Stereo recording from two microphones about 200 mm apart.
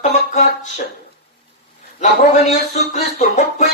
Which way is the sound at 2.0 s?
35° left (ahead or behind).